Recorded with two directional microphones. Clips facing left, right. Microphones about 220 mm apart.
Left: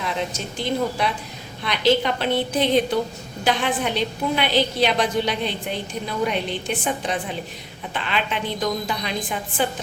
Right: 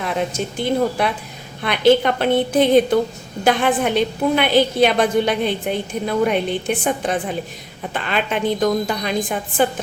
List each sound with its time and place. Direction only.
0.0 s a woman's voice: 55° right (ahead or behind)